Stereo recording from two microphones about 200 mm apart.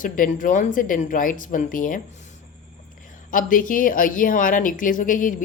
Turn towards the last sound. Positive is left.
turn(degrees=40)  # may be behind; listen again after turning